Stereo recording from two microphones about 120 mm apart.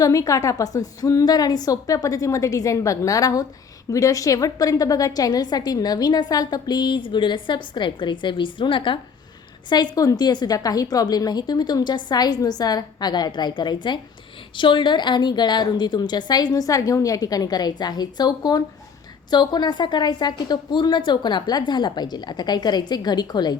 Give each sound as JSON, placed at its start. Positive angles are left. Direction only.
{"t": 0.0, "sound": "a woman's voice", "side_deg": 30}